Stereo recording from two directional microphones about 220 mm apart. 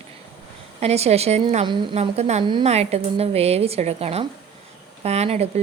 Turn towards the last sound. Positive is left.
turn(degrees=-30)  # may be behind; listen again after turning